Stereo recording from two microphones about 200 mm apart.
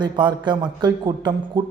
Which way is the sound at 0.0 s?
20° right (ahead or behind).